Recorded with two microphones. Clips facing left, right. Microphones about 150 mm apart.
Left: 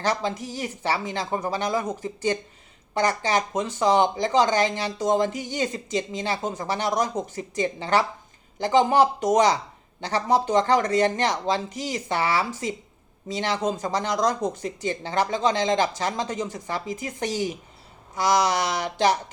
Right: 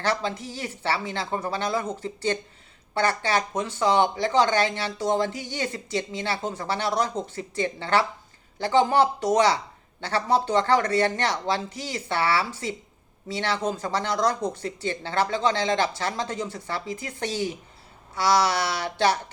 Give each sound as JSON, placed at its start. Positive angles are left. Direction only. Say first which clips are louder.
{"t": 0.0, "sound": "speech", "louder": "left 1 dB", "side_deg": 15}